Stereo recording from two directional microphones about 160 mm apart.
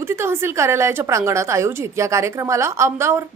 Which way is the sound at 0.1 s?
15° right (ahead or behind).